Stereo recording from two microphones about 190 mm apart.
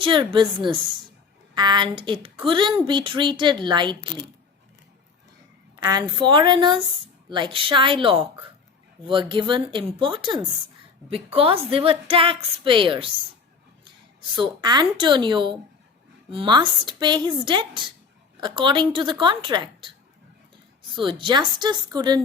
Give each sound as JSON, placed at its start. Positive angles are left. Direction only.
{"t": 0.0, "sound": "a woman's voice", "side_deg": -25}
{"t": 5.8, "sound": "a woman's voice", "side_deg": -20}
{"t": 13.8, "sound": "a sound", "side_deg": -25}
{"t": 14.6, "sound": "a woman's voice", "side_deg": -20}
{"t": 21.0, "sound": "a woman's voice", "side_deg": -25}